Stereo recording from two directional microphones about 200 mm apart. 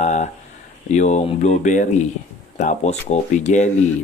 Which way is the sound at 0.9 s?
35° left (ahead or behind).